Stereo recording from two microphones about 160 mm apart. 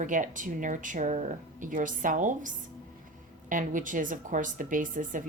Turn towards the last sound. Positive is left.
turn(degrees=-55)  # may be behind; listen again after turning